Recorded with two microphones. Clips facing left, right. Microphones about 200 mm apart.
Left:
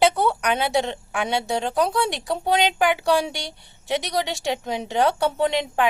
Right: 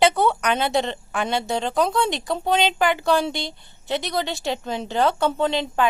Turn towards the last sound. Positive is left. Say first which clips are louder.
# even
turn(degrees=15)  # may be behind; listen again after turning